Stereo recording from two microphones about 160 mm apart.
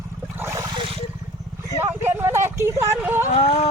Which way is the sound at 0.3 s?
15° right (ahead or behind).